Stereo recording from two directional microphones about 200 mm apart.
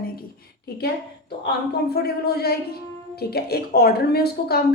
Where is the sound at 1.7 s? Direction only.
50° left (ahead or behind).